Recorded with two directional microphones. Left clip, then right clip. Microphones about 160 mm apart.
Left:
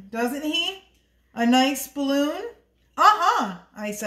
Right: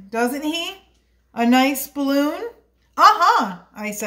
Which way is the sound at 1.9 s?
35° right (ahead or behind).